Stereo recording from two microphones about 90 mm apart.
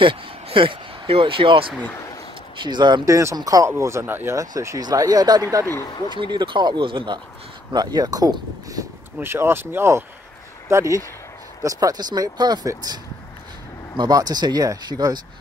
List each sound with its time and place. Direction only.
0.0 s speech: 70° right (ahead or behind)
2.6 s speech: 55° right (ahead or behind)
3.1 s speech: 35° right (ahead or behind)
4.4 s speech: 40° right (ahead or behind)
6.0 s speech: 60° right (ahead or behind)
7.7 s speech: 50° right (ahead or behind)
9.2 s speech: 25° right (ahead or behind); by 15.1 s 45° right (ahead or behind)